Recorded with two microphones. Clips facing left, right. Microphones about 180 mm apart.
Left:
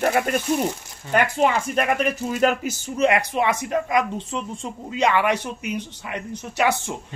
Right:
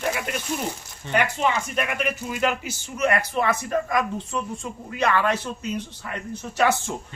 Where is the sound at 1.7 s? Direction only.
40° left (ahead or behind).